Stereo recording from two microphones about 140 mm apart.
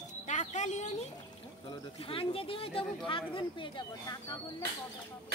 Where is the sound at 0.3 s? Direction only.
60° left (ahead or behind).